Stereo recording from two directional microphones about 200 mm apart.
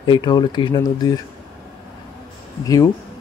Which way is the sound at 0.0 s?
20° left (ahead or behind).